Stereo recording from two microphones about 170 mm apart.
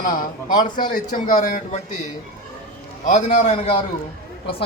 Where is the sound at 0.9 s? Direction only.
50° left (ahead or behind).